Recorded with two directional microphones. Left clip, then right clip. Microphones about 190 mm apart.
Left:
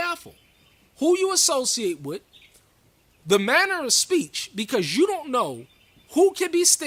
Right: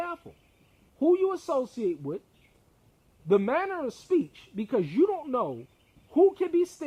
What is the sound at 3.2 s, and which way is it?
A woman's voice, 15° left (ahead or behind).